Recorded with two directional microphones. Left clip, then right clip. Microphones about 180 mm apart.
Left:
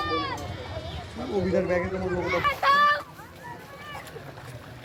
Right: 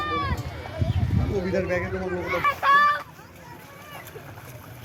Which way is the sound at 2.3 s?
50° right (ahead or behind).